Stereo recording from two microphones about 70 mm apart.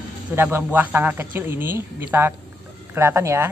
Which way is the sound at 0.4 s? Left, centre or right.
Right.